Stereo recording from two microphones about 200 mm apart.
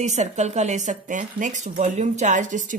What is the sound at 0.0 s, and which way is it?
Speech, 35° right (ahead or behind).